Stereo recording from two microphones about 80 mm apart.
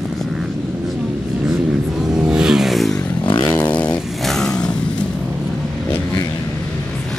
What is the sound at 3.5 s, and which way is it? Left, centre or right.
Vehicle, centre.